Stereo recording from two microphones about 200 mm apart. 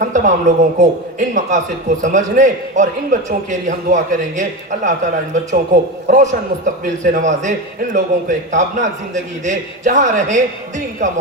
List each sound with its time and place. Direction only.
0.0 s a man's voice: 40° right (ahead or behind)